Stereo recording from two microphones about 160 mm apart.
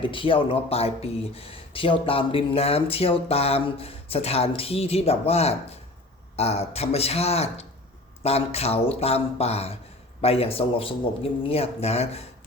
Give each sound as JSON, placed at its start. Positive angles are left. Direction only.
{"t": 0.0, "sound": "speech", "side_deg": 30}